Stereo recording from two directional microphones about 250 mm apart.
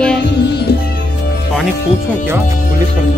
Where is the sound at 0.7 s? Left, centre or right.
Left.